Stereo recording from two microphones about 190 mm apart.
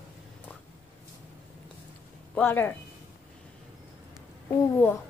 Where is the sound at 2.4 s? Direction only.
10° left (ahead or behind).